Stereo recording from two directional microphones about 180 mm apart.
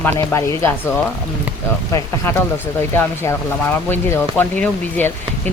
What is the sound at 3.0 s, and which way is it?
Speech, 10° left (ahead or behind).